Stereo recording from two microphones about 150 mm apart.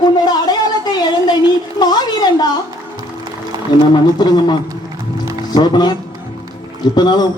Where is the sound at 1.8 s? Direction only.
30° left (ahead or behind).